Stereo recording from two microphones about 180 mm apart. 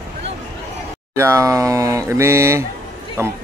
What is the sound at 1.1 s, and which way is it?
Speech, 15° right (ahead or behind).